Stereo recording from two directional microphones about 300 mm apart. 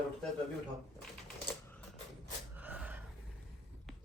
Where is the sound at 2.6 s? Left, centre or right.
Centre.